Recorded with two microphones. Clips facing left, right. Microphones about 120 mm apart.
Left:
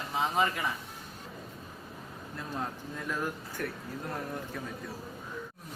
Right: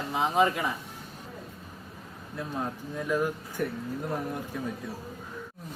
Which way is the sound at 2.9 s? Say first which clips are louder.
Right 8 dB; 10° right (ahead or behind).